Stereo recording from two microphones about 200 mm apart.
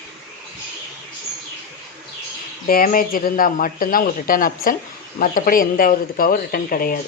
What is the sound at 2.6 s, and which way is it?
Speech, 45° left (ahead or behind).